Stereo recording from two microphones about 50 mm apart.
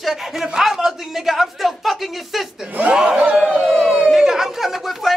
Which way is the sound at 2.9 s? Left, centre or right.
Centre.